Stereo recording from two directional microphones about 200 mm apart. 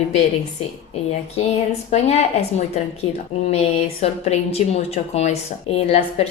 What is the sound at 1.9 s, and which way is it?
Speech, 35° left (ahead or behind).